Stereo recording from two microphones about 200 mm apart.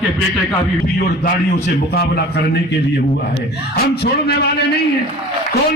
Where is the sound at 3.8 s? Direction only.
50° left (ahead or behind).